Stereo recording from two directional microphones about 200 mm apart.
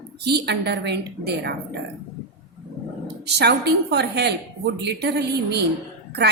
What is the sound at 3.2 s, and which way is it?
A woman's voice, 55° right (ahead or behind).